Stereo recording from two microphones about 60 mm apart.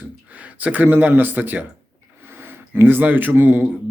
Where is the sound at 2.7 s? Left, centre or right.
Right.